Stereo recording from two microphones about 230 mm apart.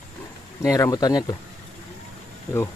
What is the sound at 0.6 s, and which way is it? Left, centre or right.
Speech, centre.